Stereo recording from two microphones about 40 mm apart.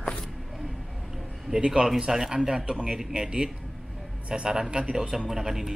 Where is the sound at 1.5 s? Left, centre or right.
Centre.